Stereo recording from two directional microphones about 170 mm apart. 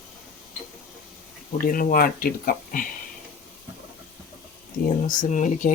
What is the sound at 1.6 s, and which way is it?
Speech, 55° left (ahead or behind).